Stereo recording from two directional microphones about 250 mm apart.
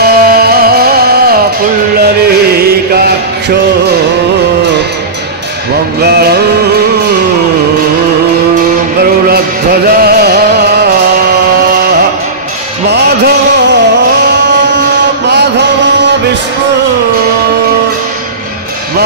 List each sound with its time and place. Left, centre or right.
0.0 s music: right
6.0 s music: right
9.3 s music: right
12.9 s a sound: right